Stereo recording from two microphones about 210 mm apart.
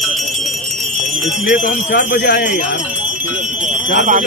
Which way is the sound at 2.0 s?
50° left (ahead or behind).